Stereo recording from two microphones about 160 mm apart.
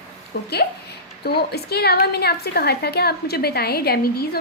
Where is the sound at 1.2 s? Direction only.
85° left.